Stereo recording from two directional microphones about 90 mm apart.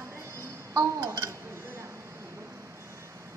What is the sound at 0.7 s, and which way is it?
Speech, 40° right (ahead or behind).